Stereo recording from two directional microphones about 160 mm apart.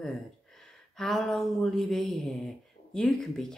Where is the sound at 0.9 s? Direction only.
5° left (ahead or behind).